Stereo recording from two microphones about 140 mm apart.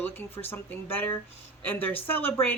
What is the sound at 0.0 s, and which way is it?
A woman's voice, 15° left (ahead or behind).